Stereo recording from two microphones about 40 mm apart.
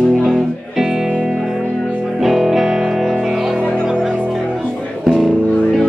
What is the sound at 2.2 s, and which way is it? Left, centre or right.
Music, centre.